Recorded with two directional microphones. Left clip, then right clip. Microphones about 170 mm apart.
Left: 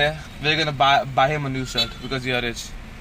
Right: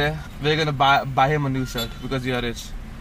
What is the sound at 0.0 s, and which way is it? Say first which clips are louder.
Speech: left 2 dB; 5° left (ahead or behind).